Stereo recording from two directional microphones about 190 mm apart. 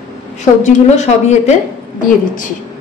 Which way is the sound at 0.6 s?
35° left (ahead or behind).